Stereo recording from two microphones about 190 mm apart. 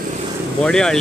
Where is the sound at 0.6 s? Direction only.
5° left (ahead or behind).